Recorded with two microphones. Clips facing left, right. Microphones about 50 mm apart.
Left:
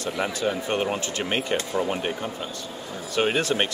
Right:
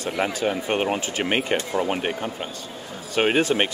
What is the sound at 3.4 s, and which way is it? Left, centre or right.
Speech, centre.